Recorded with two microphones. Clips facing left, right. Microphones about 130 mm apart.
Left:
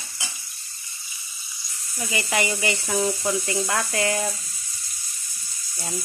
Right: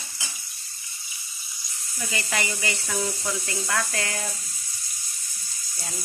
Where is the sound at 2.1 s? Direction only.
15° left (ahead or behind).